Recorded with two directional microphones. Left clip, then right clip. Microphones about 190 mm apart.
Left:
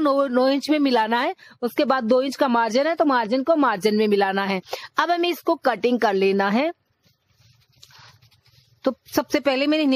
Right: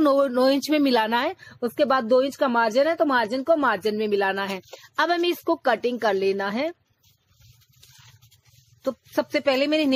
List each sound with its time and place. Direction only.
0.0 s speech: 45° left (ahead or behind)
8.8 s speech: 45° left (ahead or behind)